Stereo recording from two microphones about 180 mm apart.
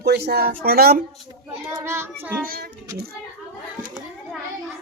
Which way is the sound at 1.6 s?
20° right (ahead or behind).